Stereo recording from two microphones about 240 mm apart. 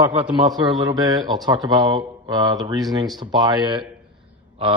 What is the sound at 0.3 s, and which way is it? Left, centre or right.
A man's voice, centre.